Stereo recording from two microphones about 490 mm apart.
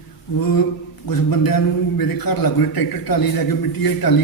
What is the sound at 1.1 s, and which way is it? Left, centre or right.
A man's voice, left.